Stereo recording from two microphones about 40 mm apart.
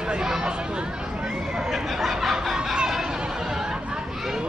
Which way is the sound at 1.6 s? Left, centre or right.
Centre.